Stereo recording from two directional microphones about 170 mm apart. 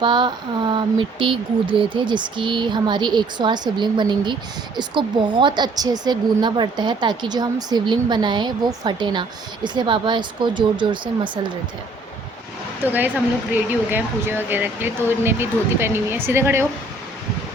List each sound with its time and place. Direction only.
0.0 s speech: 25° right (ahead or behind)
12.8 s speech: 10° right (ahead or behind)